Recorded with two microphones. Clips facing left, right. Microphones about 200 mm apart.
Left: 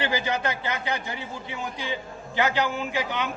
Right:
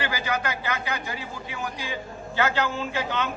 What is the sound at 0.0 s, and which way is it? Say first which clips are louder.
A man's voice: left 2 dB; 20° left (ahead or behind).